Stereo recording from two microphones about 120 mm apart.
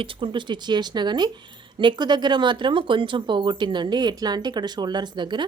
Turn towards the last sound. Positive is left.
turn(degrees=-40)  # may be behind; listen again after turning